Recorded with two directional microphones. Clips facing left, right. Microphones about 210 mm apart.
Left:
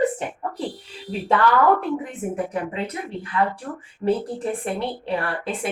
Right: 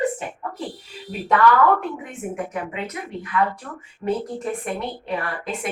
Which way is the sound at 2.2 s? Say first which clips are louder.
Right 2 dB; 30° left (ahead or behind).